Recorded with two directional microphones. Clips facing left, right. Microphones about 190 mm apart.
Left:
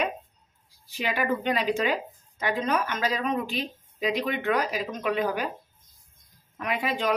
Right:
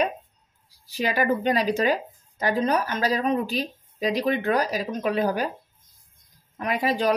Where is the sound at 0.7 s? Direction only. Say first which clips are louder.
Right 4 dB; 40° right (ahead or behind).